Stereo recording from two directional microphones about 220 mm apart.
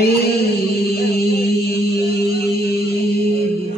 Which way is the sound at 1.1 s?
45° left (ahead or behind).